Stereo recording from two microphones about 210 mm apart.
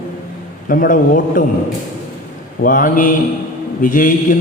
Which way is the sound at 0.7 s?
40° left (ahead or behind).